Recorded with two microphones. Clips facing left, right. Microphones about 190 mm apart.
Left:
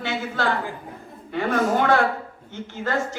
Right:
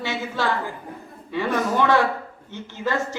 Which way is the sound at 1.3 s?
50° left (ahead or behind).